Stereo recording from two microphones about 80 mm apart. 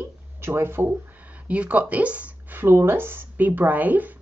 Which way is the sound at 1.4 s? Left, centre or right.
Centre.